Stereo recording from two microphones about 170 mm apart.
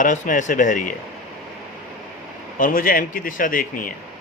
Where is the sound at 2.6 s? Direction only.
55° left (ahead or behind).